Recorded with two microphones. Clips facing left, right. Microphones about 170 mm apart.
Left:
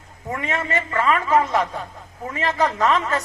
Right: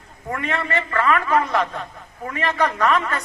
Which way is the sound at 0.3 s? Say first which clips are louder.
Even; 20° left (ahead or behind).